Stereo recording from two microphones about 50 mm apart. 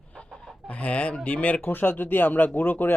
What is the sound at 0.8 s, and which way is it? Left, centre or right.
Speech, left.